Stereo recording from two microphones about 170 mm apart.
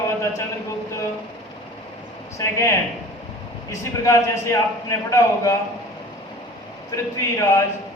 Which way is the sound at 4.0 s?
15° left (ahead or behind).